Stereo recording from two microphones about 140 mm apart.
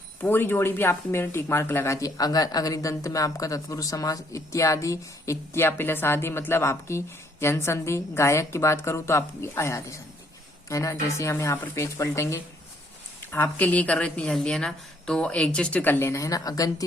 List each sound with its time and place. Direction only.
0.2 s a woman's voice: 15° left (ahead or behind)